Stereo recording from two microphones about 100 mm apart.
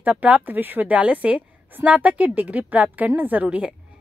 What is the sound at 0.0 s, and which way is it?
Speech, 15° right (ahead or behind).